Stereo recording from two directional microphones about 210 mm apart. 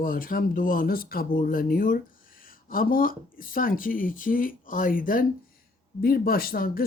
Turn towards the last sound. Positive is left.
turn(degrees=45)  # may be behind; listen again after turning